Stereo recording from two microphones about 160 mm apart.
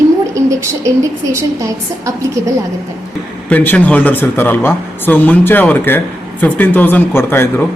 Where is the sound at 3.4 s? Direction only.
10° left (ahead or behind).